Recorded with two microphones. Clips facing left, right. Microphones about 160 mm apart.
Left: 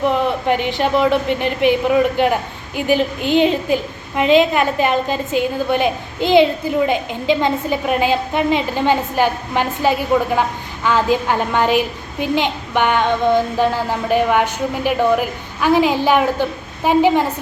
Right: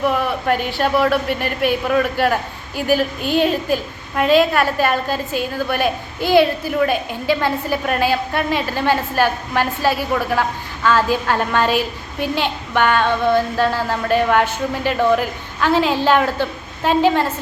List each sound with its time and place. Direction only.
0.0 s a woman's voice: 20° left (ahead or behind)